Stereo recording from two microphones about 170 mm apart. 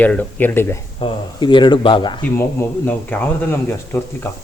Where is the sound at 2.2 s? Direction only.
15° left (ahead or behind).